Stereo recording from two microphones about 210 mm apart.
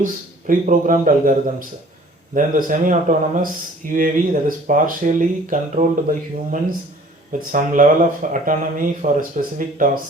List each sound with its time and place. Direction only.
0.0 s speech: 40° right (ahead or behind)